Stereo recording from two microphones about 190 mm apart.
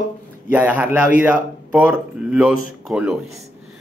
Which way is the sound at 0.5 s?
10° right (ahead or behind).